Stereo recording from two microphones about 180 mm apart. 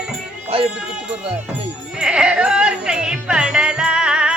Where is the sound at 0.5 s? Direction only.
30° right (ahead or behind).